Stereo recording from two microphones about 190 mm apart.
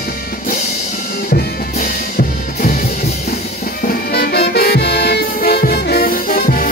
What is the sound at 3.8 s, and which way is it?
Music, 50° left (ahead or behind).